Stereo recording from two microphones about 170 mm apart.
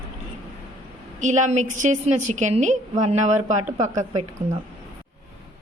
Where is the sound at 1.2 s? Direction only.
45° right (ahead or behind).